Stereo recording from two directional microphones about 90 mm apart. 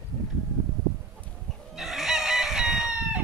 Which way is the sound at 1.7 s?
5° right (ahead or behind).